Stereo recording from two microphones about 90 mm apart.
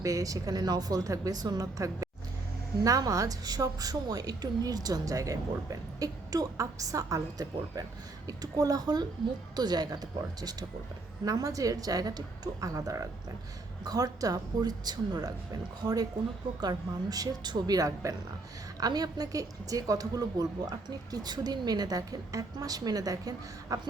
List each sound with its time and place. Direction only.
0.0 s a woman's voice: 40° right (ahead or behind)